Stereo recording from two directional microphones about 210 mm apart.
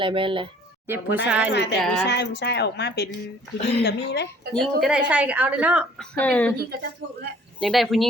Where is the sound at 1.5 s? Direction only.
55° left (ahead or behind).